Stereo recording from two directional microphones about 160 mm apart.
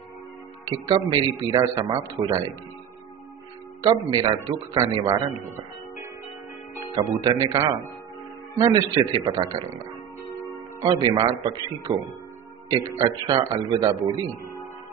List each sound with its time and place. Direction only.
0.7 s a man's voice: 25° right (ahead or behind)
3.8 s a man's voice: 30° right (ahead or behind)
7.1 s a man's voice: 25° right (ahead or behind)
10.8 s a man's voice: 30° right (ahead or behind)
13.3 s a man's voice: 30° right (ahead or behind)